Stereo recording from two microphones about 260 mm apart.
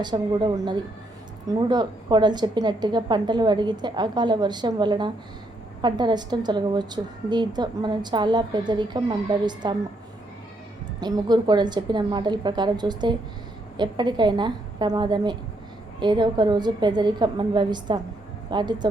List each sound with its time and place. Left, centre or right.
0.0 s a woman's voice: centre
11.0 s a woman's voice: centre